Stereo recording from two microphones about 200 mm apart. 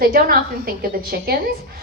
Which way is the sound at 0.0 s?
45° right (ahead or behind).